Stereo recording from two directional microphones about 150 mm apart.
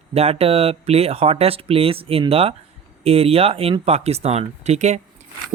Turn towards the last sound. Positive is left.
turn(degrees=-50)  # may be behind; listen again after turning